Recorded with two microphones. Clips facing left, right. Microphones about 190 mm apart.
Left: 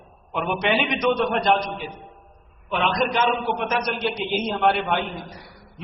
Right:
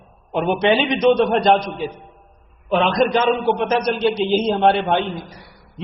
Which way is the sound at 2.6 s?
35° right (ahead or behind).